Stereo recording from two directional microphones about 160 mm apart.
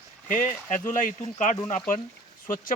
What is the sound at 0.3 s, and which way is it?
Speech, 55° left (ahead or behind).